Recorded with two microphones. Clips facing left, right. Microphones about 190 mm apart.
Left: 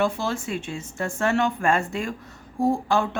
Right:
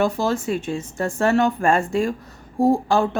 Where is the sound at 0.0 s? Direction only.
40° right (ahead or behind).